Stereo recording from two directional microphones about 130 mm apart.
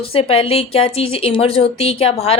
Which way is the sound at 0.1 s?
50° left (ahead or behind).